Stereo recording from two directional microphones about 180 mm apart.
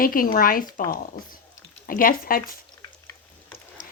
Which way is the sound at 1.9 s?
50° left (ahead or behind).